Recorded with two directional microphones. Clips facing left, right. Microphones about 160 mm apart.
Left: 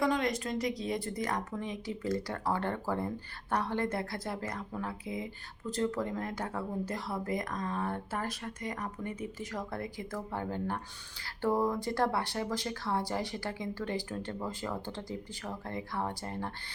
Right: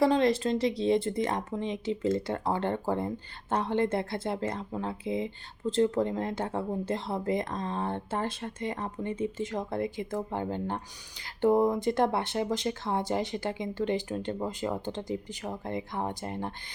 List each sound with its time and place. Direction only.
0.0 s speech: 30° right (ahead or behind)